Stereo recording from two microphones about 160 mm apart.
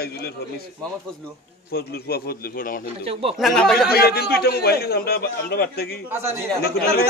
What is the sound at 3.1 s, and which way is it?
Speech, 35° right (ahead or behind).